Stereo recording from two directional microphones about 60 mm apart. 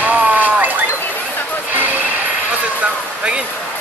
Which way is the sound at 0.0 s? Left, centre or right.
Right.